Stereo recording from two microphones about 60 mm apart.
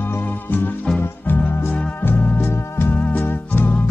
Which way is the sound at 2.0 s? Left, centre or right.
Left.